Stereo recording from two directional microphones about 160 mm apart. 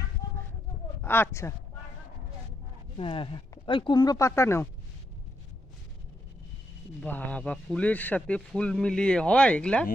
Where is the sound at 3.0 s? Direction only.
35° left (ahead or behind); by 4.6 s 15° left (ahead or behind).